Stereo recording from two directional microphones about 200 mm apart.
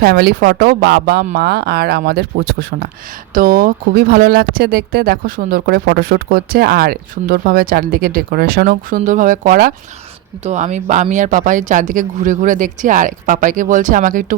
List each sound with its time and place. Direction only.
0.0 s speech: 50° right (ahead or behind)